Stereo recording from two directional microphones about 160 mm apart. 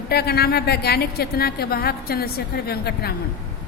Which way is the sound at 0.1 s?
80° left.